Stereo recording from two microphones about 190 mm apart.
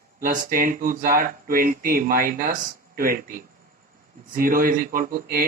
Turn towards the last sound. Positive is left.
turn(degrees=-50)  # may be behind; listen again after turning